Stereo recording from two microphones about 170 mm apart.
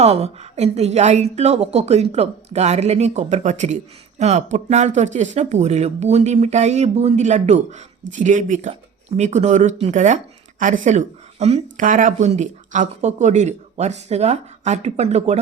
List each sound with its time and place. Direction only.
0.0 s a woman's voice: 35° right (ahead or behind)